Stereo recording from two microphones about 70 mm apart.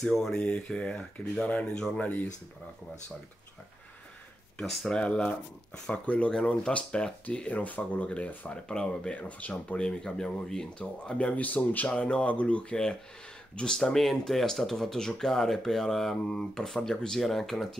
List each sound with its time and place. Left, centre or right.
0.0 s speech: centre
2.0 s speech: left
4.6 s speech: centre; by 11.9 s left
11.9 s speech: centre